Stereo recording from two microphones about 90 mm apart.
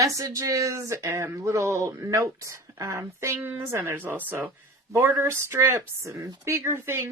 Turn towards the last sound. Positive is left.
turn(degrees=-30)  # may be behind; listen again after turning